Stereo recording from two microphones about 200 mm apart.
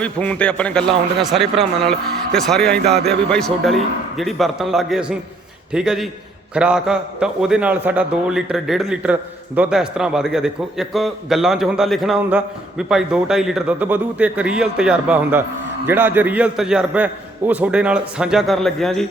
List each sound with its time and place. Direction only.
0.0 s a man's voice: 5° left (ahead or behind)